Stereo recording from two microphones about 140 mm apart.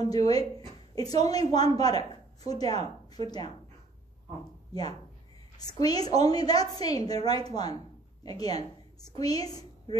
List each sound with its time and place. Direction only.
0.0 s a woman's voice: 25° left (ahead or behind)
4.7 s a woman's voice: 30° left (ahead or behind)